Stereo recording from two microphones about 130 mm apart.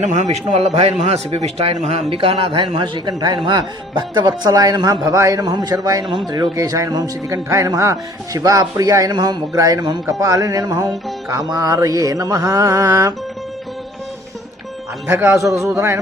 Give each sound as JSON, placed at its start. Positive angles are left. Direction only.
{"t": 0.0, "sound": "a man's voice", "side_deg": -60}
{"t": 15.0, "sound": "a man's voice", "side_deg": -20}